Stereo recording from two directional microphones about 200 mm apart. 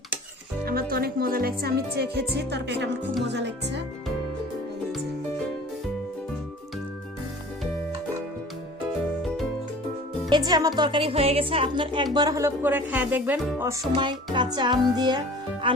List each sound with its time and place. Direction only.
0.6 s speech: 45° right (ahead or behind)
10.2 s speech: 20° right (ahead or behind)
13.9 s speech: 25° right (ahead or behind)